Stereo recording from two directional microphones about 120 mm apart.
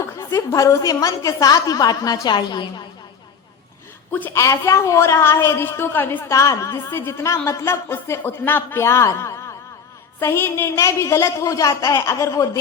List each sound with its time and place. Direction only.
0.0 s a woman's voice: 25° left (ahead or behind)
4.4 s a woman's voice: 25° left (ahead or behind)